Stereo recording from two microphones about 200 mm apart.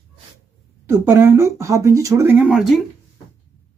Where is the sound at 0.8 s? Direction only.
10° right (ahead or behind).